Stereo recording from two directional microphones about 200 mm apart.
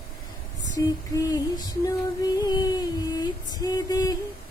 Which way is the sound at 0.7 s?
15° left (ahead or behind).